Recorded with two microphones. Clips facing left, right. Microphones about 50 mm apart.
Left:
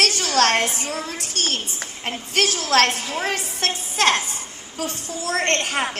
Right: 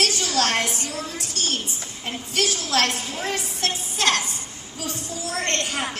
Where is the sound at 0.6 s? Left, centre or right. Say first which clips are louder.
Left 3 dB; left.